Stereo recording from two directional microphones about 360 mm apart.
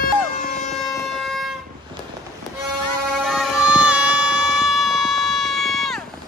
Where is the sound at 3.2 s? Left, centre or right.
Centre.